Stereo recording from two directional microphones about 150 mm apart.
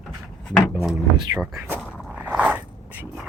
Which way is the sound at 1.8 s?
Centre (ahead or behind).